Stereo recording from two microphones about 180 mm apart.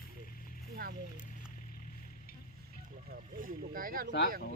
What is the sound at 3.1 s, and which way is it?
Speech, 50° right (ahead or behind).